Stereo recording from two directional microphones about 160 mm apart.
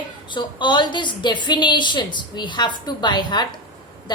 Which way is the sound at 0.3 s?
30° left (ahead or behind).